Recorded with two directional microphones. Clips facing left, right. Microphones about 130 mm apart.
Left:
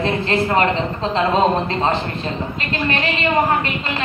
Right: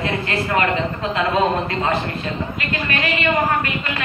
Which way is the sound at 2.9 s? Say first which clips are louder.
Left 1 dB; 25° left (ahead or behind).